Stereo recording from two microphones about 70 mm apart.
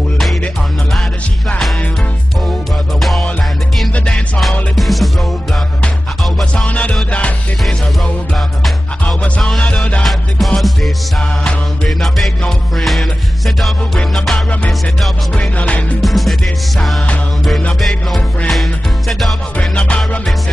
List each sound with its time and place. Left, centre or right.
3.0 s music: centre
3.9 s music: centre
4.4 s music: centre
6.5 s music: centre
9.6 s music: centre
10.0 s music: centre
14.3 s music: centre
16.0 s music: centre
17.7 s music: centre
19.7 s music: centre